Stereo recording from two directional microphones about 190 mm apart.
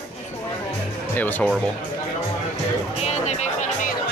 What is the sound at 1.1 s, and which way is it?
Speech, 10° left (ahead or behind).